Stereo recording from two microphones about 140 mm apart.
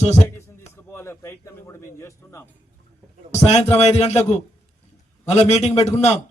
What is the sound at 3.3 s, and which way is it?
A man's voice, 50° left (ahead or behind).